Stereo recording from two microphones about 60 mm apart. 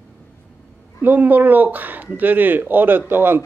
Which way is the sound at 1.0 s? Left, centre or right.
Right.